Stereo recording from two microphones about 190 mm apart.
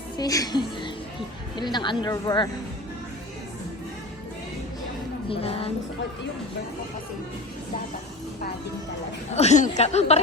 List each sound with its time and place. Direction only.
0.2 s a woman's voice: 20° left (ahead or behind)
5.3 s a woman's voice: 30° left (ahead or behind)
9.3 s a woman's voice: 35° left (ahead or behind)